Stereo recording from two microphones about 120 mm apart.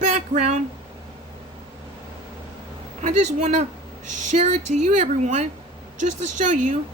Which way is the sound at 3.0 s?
80° right.